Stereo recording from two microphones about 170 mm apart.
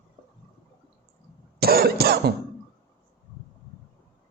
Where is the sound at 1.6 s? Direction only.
65° right (ahead or behind).